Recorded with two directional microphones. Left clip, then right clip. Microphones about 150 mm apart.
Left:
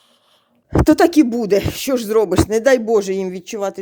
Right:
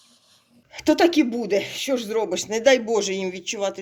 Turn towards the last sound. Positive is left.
turn(degrees=55)  # may be behind; listen again after turning